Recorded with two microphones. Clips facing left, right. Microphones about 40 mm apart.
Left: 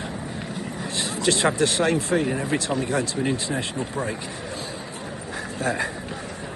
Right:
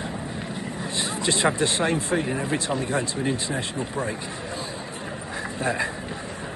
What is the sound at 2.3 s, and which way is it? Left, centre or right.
Speech, right.